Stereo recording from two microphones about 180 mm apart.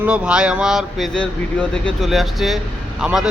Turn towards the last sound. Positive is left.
turn(degrees=-5)  # may be behind; listen again after turning